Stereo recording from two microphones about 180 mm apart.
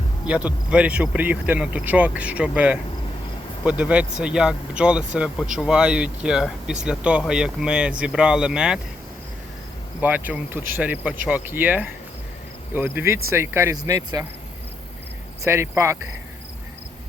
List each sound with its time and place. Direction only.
0.3 s speech: 5° right (ahead or behind)
10.0 s speech: 10° right (ahead or behind)
15.4 s speech: 15° right (ahead or behind)